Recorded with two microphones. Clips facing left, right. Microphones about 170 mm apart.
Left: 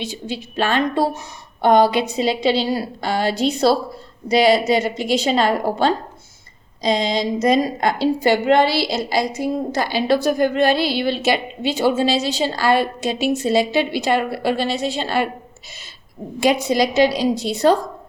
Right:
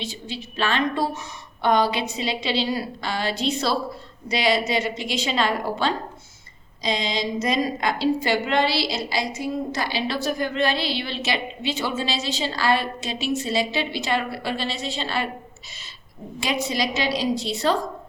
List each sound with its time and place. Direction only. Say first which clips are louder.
0.3 s a woman's voice: left 5 dB; 45° left (ahead or behind)
16.6 s a woman's voice: left 9 dB; 45° left (ahead or behind)